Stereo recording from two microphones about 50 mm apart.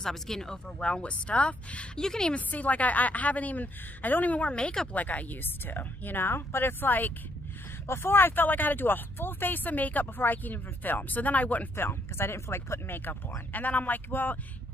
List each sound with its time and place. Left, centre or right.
0.0 s speech: centre; by 1.9 s left
2.0 s speech: centre
2.3 s speech: left
5.0 s speech: left
7.9 s speech: left
11.7 s speech: left
13.5 s speech: left